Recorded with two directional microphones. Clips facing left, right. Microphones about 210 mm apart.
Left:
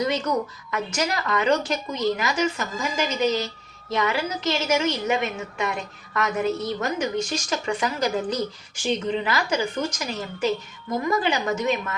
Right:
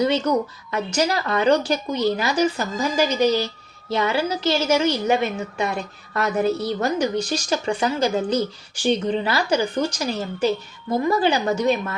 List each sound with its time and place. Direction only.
0.0 s a woman's voice: 30° right (ahead or behind)